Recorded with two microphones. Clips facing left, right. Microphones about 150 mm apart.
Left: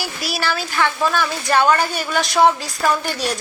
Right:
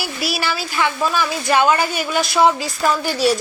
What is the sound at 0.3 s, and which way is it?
Speech, 10° right (ahead or behind).